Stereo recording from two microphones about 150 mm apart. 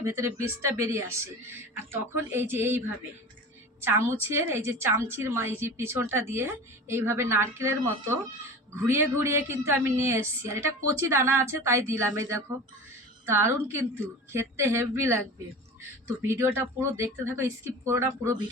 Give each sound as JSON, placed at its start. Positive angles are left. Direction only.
{"t": 0.0, "sound": "a woman's voice", "side_deg": -20}
{"t": 16.2, "sound": "a woman's voice", "side_deg": -15}